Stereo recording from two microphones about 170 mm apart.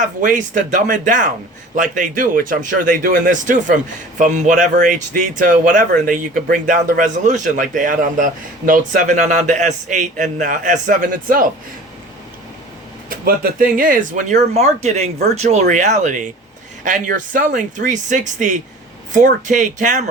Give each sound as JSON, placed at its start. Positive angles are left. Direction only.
{"t": 0.0, "sound": "speech", "side_deg": -50}
{"t": 13.1, "sound": "speech", "side_deg": -60}